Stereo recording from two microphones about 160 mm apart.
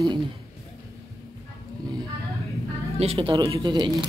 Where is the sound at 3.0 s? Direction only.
35° right (ahead or behind).